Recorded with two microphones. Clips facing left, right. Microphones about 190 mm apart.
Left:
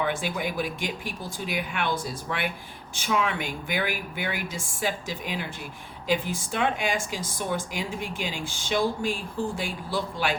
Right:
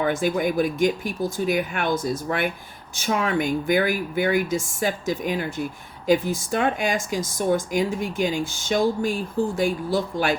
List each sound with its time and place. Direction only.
0.0 s speech: 45° right (ahead or behind)